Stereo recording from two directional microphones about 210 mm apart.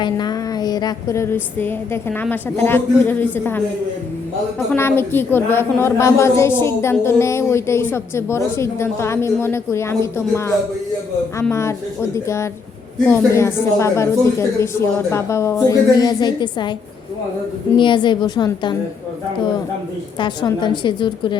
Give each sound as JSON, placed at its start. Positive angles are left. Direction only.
{"t": 0.0, "sound": "a woman's voice", "side_deg": 20}
{"t": 4.7, "sound": "a woman's voice", "side_deg": 10}
{"t": 17.7, "sound": "a woman's voice", "side_deg": 20}
{"t": 20.1, "sound": "a woman's voice", "side_deg": 20}